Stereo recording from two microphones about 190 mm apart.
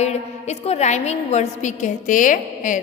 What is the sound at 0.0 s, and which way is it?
A woman's voice, 35° left (ahead or behind).